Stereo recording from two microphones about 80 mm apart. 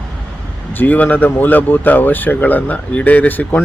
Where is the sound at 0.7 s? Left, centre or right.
Left.